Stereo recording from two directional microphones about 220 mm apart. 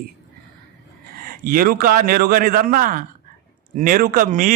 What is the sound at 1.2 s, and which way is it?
A man's voice, 40° right (ahead or behind).